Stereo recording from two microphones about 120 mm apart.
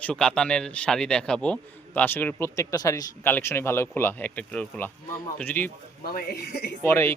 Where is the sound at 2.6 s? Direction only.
30° left (ahead or behind).